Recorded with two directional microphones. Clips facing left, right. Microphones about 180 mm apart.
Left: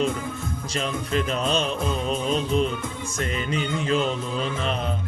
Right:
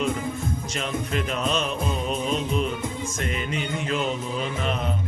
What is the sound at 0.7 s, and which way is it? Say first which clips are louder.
Mantra: left 5 dB; 35° left (ahead or behind).